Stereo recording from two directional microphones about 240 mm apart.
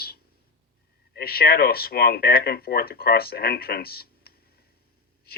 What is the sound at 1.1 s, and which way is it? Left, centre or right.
Speech, left.